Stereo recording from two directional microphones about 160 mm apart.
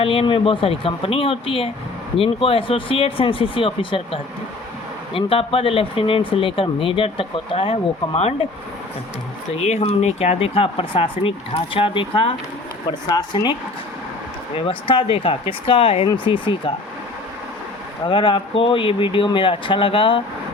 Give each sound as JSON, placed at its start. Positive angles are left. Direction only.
{"t": 0.0, "sound": "speech", "side_deg": 35}
{"t": 9.6, "sound": "speech", "side_deg": 40}
{"t": 18.0, "sound": "speech", "side_deg": 30}